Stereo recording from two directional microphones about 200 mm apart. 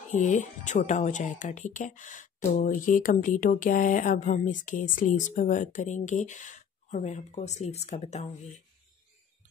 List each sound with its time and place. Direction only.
0.2 s speech: 35° left (ahead or behind)